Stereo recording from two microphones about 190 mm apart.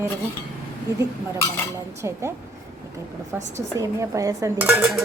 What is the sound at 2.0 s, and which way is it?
Speech, 15° right (ahead or behind).